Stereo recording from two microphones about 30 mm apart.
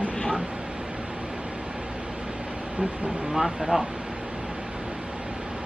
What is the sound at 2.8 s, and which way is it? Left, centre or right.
Speech, right.